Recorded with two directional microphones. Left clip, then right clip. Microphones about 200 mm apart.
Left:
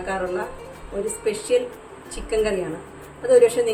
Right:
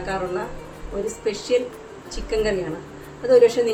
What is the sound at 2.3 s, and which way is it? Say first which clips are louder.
Speech: even; centre (ahead or behind).